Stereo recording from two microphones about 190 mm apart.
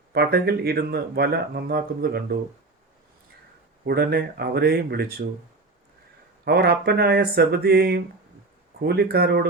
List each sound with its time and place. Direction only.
0.1 s speech: 55° right (ahead or behind)
3.8 s speech: 55° right (ahead or behind)
6.4 s speech: 55° right (ahead or behind)